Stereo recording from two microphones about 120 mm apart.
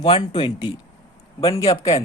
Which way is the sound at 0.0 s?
45° left (ahead or behind).